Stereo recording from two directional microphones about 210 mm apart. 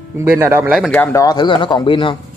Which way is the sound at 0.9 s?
10° left (ahead or behind).